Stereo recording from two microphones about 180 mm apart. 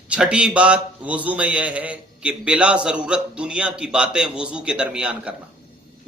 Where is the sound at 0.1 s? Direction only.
5° right (ahead or behind).